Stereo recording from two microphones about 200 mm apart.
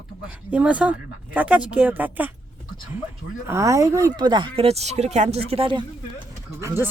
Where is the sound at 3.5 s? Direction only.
15° right (ahead or behind).